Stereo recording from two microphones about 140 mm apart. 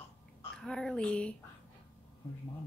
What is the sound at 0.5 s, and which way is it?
Speech, 5° left (ahead or behind).